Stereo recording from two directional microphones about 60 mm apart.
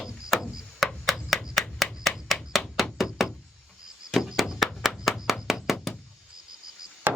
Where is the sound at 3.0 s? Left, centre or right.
Centre.